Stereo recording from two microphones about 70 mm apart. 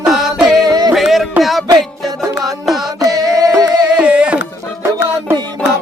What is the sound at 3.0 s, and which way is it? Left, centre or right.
Music, right.